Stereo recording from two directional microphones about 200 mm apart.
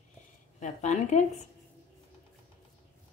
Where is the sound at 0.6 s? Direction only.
35° left (ahead or behind).